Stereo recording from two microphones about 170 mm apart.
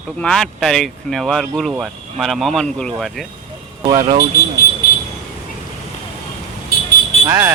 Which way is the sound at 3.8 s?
30° right (ahead or behind).